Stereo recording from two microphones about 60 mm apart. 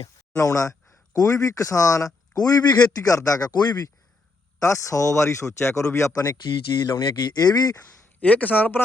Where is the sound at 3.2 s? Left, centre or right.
Left.